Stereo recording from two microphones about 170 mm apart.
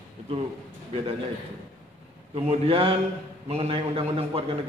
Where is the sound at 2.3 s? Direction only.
35° right (ahead or behind).